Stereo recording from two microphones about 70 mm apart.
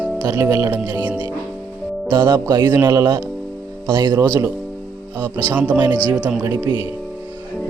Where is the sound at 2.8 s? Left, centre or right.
Right.